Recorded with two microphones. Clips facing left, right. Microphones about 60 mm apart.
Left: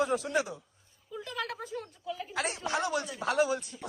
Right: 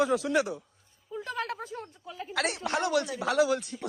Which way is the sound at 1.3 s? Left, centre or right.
Right.